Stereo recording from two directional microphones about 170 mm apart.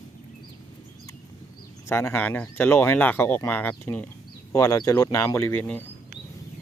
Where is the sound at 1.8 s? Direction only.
15° left (ahead or behind).